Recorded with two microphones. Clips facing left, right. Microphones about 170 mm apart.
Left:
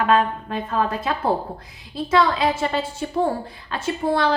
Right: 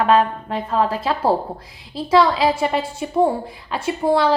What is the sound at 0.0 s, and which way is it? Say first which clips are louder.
A woman's voice: right 3 dB; 30° right (ahead or behind).